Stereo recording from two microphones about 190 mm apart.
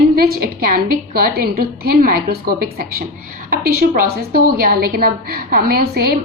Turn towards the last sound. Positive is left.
turn(degrees=-55)  # may be behind; listen again after turning